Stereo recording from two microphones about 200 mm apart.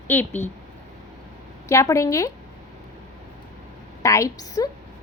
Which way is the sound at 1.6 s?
15° left (ahead or behind).